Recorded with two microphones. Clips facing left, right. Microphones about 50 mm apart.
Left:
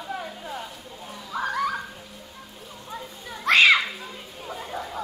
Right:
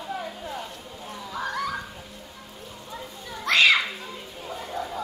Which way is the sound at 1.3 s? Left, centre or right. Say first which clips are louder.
Left 4 dB; left.